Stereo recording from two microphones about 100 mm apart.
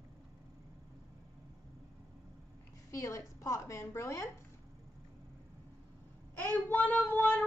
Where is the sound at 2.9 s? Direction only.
30° left (ahead or behind).